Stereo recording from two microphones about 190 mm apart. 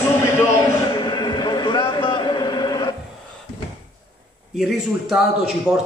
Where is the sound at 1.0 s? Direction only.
25° left (ahead or behind).